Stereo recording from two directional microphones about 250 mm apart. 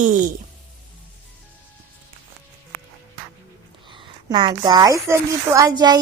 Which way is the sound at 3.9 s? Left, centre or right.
Centre.